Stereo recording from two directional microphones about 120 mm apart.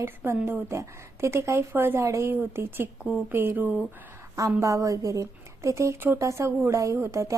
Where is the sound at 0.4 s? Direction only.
20° right (ahead or behind).